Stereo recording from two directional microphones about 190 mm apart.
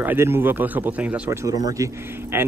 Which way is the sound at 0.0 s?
10° right (ahead or behind).